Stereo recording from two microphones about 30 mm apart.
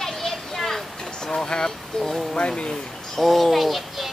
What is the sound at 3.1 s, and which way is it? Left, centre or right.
Speech, centre.